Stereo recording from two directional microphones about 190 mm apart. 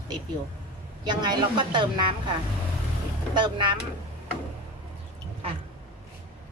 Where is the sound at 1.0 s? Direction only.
25° right (ahead or behind).